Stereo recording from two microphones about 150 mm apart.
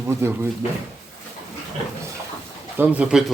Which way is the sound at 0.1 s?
15° right (ahead or behind).